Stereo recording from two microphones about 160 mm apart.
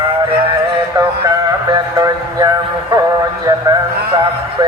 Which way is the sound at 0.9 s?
25° right (ahead or behind).